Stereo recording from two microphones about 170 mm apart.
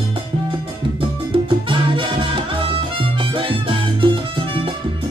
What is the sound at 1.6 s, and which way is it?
Music, 30° right (ahead or behind).